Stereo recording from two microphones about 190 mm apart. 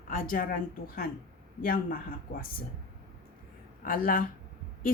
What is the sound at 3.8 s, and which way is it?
Speech, 45° left (ahead or behind).